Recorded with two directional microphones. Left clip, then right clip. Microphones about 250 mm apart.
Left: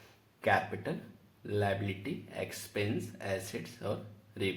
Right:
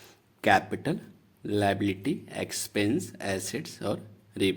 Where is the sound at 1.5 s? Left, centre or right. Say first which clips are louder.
Right 7 dB; right.